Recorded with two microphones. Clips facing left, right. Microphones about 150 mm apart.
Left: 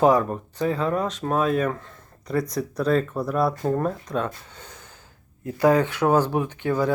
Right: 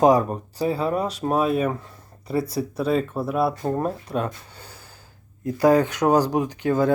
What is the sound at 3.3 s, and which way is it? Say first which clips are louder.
Speech: even; 5° right (ahead or behind).